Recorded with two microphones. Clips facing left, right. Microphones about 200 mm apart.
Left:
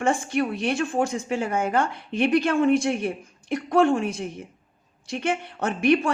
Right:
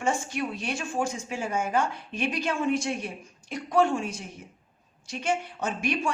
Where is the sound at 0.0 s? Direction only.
60° left (ahead or behind).